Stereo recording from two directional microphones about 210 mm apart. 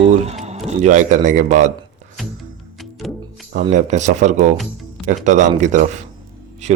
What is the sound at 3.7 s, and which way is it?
Speech, 35° right (ahead or behind).